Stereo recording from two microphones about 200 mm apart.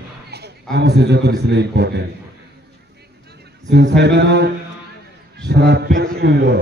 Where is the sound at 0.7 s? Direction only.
55° right (ahead or behind).